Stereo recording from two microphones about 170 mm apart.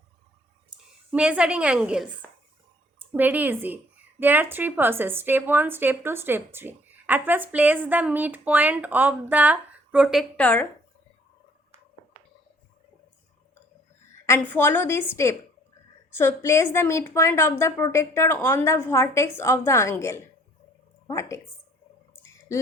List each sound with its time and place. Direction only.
1.1 s a woman's voice: 5° right (ahead or behind)
3.1 s a woman's voice: 10° right (ahead or behind); by 10.7 s 10° left (ahead or behind)
14.3 s a woman's voice: 10° left (ahead or behind)
22.1 s a sound: 15° left (ahead or behind)